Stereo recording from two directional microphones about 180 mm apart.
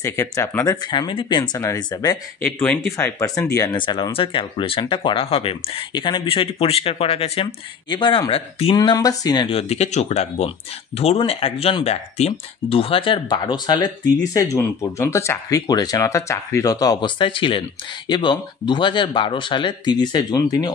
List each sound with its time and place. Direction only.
0.0 s speech: 15° left (ahead or behind)